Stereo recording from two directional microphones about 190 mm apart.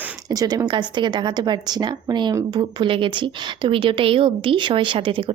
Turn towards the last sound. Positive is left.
turn(degrees=-25)  # may be behind; listen again after turning